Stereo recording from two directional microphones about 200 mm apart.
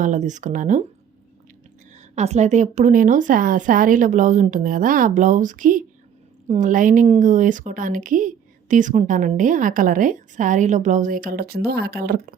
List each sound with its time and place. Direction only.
0.0 s a woman's voice: 40° right (ahead or behind)
2.0 s a woman's voice: 35° right (ahead or behind); by 12.2 s 50° right (ahead or behind)